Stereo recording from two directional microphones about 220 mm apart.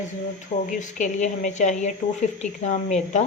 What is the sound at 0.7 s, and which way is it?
Speech, 35° left (ahead or behind).